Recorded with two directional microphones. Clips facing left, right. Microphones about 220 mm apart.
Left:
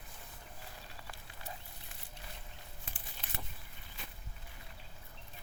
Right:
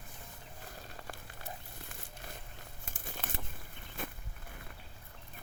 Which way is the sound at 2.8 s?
50° right (ahead or behind).